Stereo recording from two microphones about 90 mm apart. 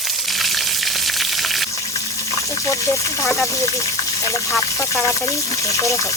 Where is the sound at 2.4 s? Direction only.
35° left (ahead or behind).